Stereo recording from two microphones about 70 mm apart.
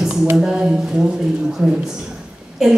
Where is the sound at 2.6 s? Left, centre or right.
Centre.